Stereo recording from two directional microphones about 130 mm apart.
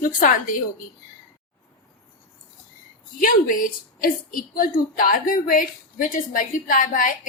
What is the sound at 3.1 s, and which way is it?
A woman's voice, 90° left.